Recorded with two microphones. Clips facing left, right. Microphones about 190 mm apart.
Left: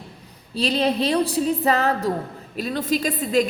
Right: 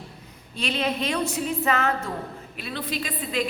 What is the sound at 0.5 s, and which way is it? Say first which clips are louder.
A woman's voice: left 6 dB; 35° left (ahead or behind).